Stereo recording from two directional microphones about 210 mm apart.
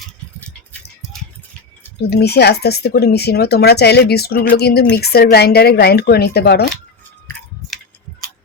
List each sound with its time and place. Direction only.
2.0 s speech: 50° left (ahead or behind)